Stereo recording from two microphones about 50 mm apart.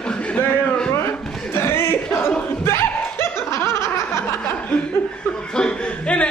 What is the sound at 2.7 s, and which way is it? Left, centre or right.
Snicker, left.